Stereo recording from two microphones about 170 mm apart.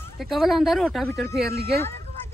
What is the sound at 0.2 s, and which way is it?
A woman's voice, centre (ahead or behind).